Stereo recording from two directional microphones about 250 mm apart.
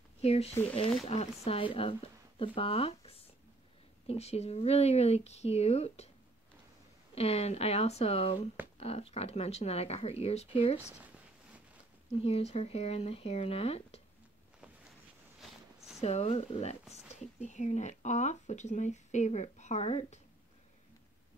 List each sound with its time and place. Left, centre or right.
0.2 s speech: left
7.2 s speech: left
12.2 s speech: left
16.0 s speech: left